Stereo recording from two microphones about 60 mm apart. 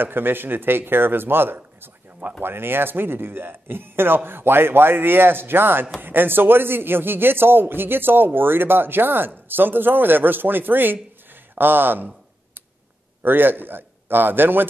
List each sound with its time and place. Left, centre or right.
0.0 s a man's voice: right
13.2 s a man's voice: right